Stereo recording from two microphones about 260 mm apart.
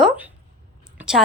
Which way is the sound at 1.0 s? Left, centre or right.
Centre.